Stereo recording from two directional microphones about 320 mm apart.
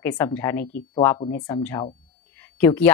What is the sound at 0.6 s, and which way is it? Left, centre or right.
Speech, left.